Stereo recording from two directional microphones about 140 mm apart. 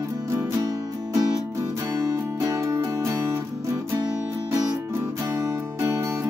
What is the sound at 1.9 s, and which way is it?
Music, 25° right (ahead or behind).